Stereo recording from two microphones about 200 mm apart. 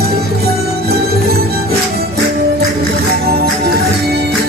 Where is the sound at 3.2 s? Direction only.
50° right (ahead or behind).